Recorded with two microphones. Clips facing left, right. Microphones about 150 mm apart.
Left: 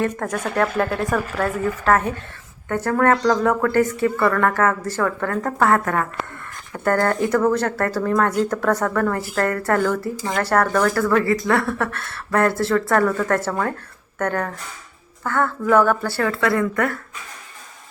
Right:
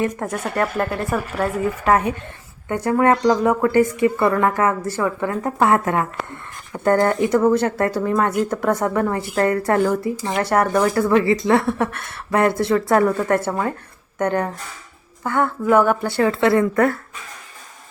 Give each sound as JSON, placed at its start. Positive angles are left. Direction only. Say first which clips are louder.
{"t": 0.0, "sound": "a woman's voice", "louder": "even", "side_deg": -10}